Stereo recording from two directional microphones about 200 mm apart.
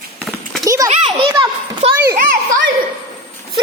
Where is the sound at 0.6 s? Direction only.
15° right (ahead or behind).